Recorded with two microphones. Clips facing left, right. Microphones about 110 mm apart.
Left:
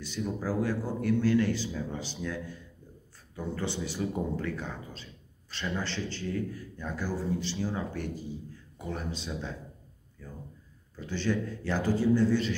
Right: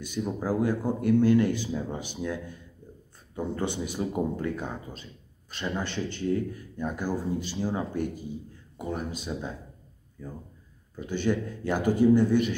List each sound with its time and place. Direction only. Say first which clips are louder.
0.2 s speech: right 3 dB; 15° right (ahead or behind)